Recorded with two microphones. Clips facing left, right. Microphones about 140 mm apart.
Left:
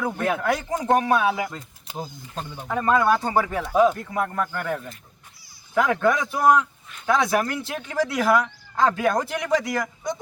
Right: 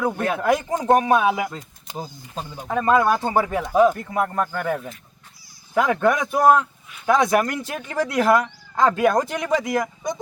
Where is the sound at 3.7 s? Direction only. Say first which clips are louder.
Right 2 dB; 5° right (ahead or behind).